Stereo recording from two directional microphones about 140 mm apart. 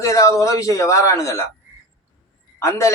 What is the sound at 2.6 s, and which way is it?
Speech, 20° left (ahead or behind).